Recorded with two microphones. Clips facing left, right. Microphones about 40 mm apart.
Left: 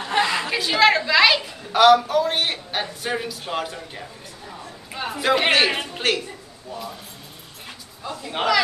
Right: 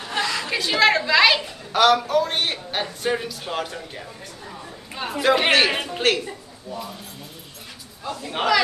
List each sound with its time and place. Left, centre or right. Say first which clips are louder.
0.2 s a sound: left 3 dB; left
0.5 s a woman's voice: right 1 dB; centre
8.2 s a man's voice: even; centre